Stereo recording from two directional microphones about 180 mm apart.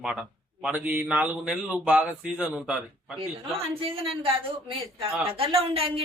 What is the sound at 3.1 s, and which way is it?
A woman's voice, 30° right (ahead or behind).